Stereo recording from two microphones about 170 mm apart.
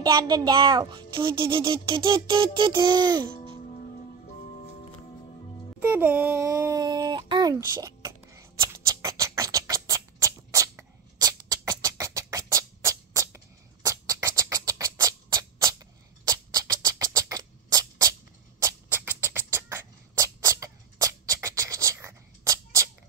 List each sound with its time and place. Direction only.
0.0 s a child's voice: 25° right (ahead or behind)
5.8 s a sound: 10° right (ahead or behind)
13.8 s rodents: 20° right (ahead or behind)